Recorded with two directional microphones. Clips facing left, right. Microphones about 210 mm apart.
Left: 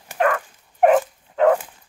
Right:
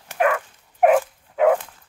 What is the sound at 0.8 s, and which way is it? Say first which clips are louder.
Dog: left 1 dB; 5° right (ahead or behind).